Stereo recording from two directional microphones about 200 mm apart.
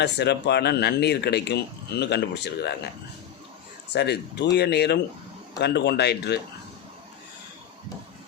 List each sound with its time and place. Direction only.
0.0 s speech: 60° left (ahead or behind)
3.9 s speech: 55° left (ahead or behind)